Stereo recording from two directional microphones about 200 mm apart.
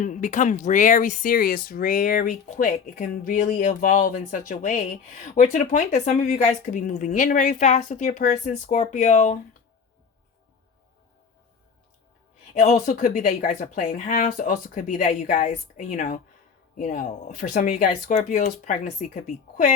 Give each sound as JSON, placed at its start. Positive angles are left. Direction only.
{"t": 0.0, "sound": "speech", "side_deg": 40}
{"t": 12.5, "sound": "speech", "side_deg": 40}